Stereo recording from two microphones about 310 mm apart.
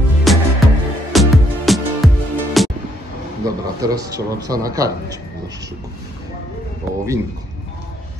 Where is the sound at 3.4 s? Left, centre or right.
Centre.